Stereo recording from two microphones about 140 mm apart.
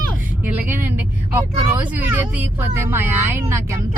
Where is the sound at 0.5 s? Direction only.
15° right (ahead or behind).